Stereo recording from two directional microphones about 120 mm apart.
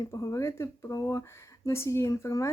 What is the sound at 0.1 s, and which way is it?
A woman's voice, 25° left (ahead or behind).